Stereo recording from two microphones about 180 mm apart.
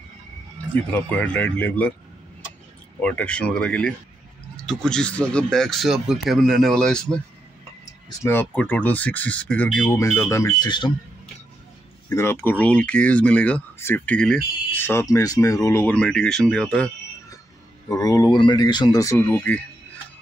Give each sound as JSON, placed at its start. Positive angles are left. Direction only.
{"t": 0.9, "sound": "speech", "side_deg": 5}
{"t": 3.0, "sound": "speech", "side_deg": 5}
{"t": 8.2, "sound": "speech", "side_deg": 10}
{"t": 12.1, "sound": "speech", "side_deg": 15}
{"t": 17.8, "sound": "speech", "side_deg": 20}